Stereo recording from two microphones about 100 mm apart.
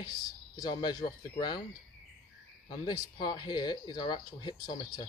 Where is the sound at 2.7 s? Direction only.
50° left (ahead or behind).